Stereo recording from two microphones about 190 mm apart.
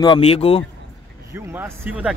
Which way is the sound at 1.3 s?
10° right (ahead or behind).